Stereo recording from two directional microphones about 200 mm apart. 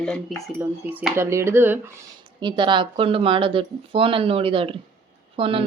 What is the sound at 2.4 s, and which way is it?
Speech, 25° right (ahead or behind).